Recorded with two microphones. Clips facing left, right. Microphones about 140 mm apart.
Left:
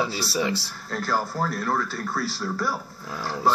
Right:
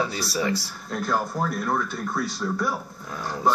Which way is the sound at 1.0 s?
5° left (ahead or behind).